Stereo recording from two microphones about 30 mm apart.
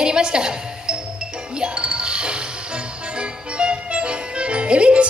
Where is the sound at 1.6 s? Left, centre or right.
Right.